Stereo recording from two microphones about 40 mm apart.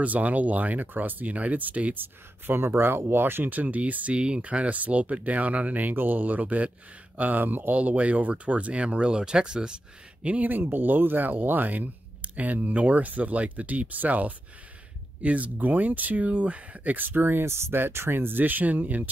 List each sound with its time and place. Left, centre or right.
0.0 s speech: right
2.0 s speech: right
3.4 s speech: right
4.2 s speech: right
4.5 s speech: right
7.7 s speech: right
10.2 s speech: right
18.4 s speech: right